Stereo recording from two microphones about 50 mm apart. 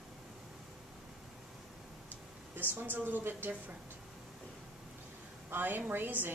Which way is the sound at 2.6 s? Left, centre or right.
Right.